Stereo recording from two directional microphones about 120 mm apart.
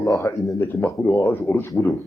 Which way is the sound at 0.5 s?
20° left (ahead or behind).